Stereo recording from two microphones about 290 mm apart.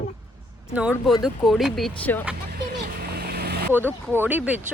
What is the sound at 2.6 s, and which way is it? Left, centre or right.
Vehicle, right.